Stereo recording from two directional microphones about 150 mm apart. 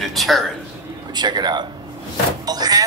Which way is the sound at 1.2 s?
30° right (ahead or behind).